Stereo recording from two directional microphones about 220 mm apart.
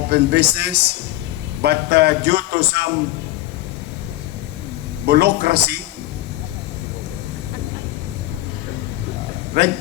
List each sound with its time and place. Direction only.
0.1 s speech: 50° right (ahead or behind)
5.0 s speech: 45° right (ahead or behind)
9.6 s speech: 50° right (ahead or behind)